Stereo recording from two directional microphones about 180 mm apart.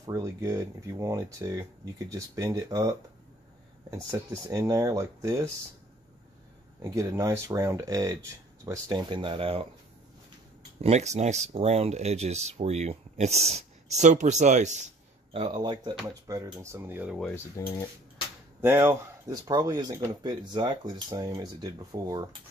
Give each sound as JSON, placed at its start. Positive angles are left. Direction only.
{"t": 0.0, "sound": "speech", "side_deg": -20}
{"t": 6.8, "sound": "speech", "side_deg": -20}
{"t": 10.8, "sound": "speech", "side_deg": -40}
{"t": 15.3, "sound": "speech", "side_deg": -25}
{"t": 17.6, "sound": "dishes", "side_deg": 15}
{"t": 18.6, "sound": "speech", "side_deg": -15}